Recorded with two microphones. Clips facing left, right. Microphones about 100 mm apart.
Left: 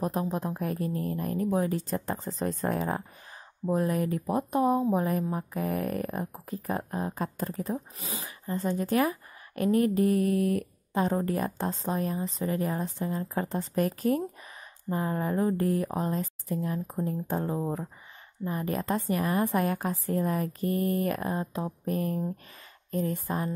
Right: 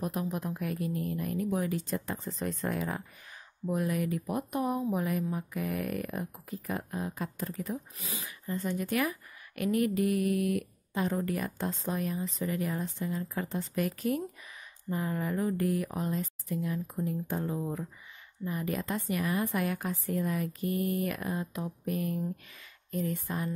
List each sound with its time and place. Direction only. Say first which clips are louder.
0.0 s speech: left 4 dB; 35° left (ahead or behind)